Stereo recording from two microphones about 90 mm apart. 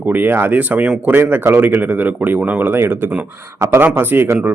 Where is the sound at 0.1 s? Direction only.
25° right (ahead or behind).